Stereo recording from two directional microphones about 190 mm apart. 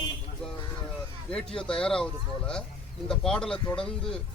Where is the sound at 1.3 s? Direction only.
5° left (ahead or behind).